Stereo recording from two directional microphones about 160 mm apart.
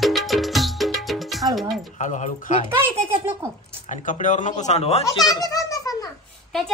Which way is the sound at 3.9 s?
50° left (ahead or behind).